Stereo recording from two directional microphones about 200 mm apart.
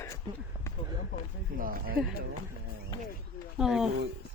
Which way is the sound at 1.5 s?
45° right (ahead or behind).